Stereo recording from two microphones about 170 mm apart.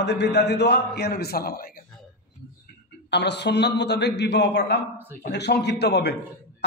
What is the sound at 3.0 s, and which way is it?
A man's voice, 85° left.